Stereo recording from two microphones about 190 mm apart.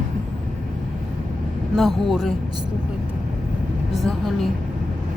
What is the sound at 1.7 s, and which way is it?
Speech, centre (ahead or behind).